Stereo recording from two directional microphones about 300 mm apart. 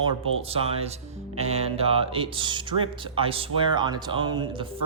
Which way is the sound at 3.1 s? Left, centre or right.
Centre.